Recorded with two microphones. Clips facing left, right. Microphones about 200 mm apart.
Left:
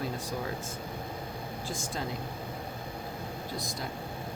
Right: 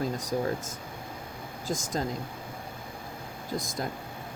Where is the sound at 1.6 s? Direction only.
40° right (ahead or behind).